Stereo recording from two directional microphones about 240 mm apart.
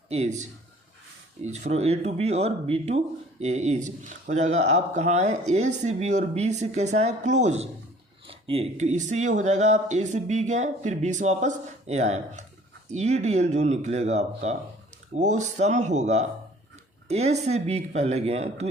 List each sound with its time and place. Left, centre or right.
0.1 s speech: right
1.5 s speech: right